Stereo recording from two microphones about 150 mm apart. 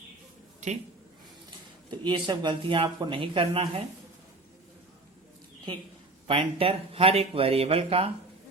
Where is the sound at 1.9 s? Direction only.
30° right (ahead or behind).